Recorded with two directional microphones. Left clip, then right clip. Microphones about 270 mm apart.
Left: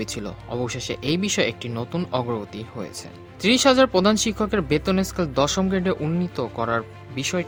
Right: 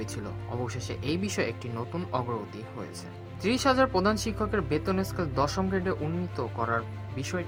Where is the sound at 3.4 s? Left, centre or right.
Left.